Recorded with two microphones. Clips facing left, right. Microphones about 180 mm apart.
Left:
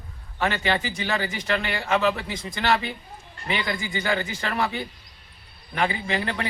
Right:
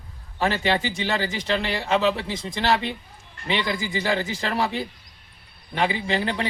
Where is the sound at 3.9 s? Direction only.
30° right (ahead or behind).